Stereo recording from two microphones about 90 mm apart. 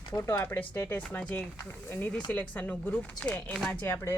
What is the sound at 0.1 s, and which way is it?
Speech, 30° left (ahead or behind).